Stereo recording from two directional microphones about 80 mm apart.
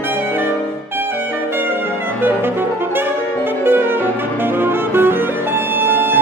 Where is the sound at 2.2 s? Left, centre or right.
Right.